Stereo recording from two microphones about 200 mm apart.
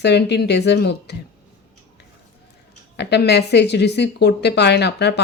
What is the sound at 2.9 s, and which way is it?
Speech, 55° left (ahead or behind).